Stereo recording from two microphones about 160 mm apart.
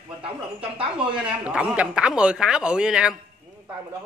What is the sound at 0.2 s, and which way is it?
Speech, 35° right (ahead or behind).